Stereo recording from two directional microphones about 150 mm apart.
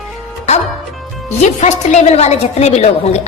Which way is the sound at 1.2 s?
50° left (ahead or behind).